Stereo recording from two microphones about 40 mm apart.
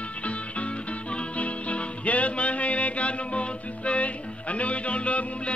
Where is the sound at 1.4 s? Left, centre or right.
Left.